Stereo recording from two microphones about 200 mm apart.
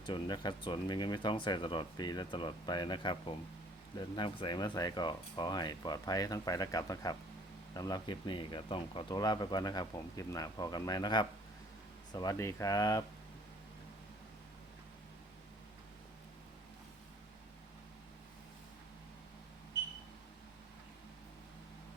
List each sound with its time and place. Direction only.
0.0 s speech: 20° left (ahead or behind)